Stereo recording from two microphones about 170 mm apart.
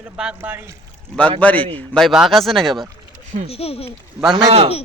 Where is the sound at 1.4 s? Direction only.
10° left (ahead or behind).